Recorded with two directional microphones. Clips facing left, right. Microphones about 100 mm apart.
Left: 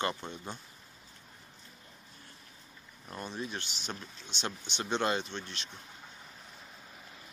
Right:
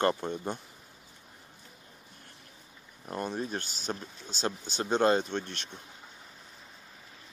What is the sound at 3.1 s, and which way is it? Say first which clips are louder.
Speech: right 5 dB; 50° right (ahead or behind).